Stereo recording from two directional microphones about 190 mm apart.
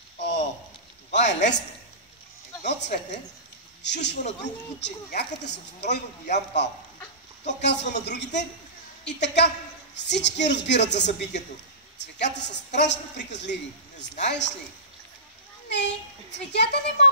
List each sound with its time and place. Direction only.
0.2 s a sound: 65° left (ahead or behind)
1.1 s a man's voice: 65° left (ahead or behind)
2.6 s a woman's voice: 65° left (ahead or behind)
15.7 s speech: 65° left (ahead or behind)